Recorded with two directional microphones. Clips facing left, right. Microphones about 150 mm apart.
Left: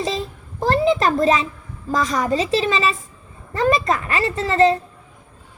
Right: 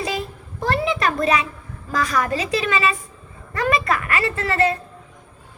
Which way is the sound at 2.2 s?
30° left (ahead or behind).